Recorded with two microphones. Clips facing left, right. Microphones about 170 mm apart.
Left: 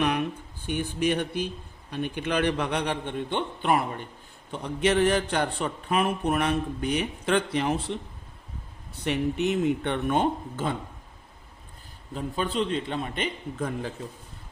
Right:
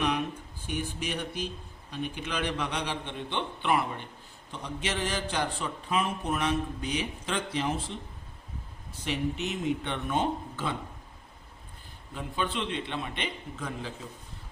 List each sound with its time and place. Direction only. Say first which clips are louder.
0.7 s a man's voice: left 7 dB; 55° left (ahead or behind)
4.5 s a man's voice: left 10 dB; 55° left (ahead or behind)
9.0 s a man's voice: left 6 dB; 60° left (ahead or behind)
12.1 s a man's voice: left 4 dB; 40° left (ahead or behind)